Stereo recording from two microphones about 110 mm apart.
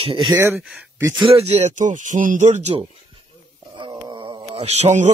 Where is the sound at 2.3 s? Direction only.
90° right.